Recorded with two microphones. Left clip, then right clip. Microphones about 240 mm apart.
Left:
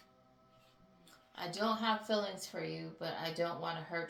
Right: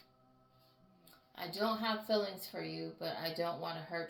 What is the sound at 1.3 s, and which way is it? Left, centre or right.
Speech, right.